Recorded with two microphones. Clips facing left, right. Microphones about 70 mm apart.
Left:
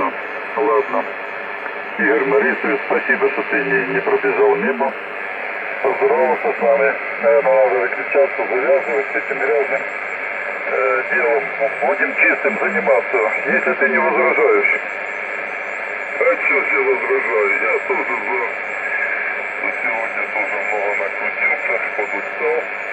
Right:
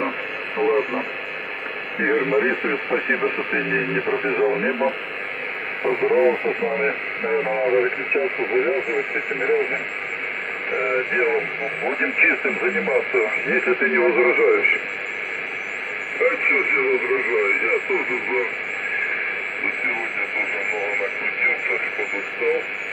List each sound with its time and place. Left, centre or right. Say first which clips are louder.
0.6 s speech: left 4 dB; left
2.2 s speech: left 5 dB; left
5.9 s speech: left 3 dB; left
6.7 s speech: left 8 dB; left
16.3 s speech: left 4 dB; left
19.9 s speech: left 4 dB; left